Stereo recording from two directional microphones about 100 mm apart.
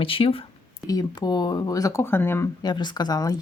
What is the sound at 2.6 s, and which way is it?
Speech, 45° left (ahead or behind).